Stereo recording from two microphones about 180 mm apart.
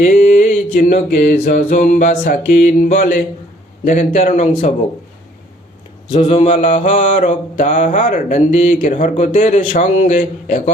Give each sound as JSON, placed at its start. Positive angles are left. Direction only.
{"t": 0.0, "sound": "mantra", "side_deg": 45}
{"t": 6.1, "sound": "a man's voice", "side_deg": 40}
{"t": 6.5, "sound": "mantra", "side_deg": 45}